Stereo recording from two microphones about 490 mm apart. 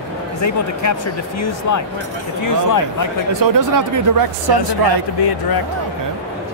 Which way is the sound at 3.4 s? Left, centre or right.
Right.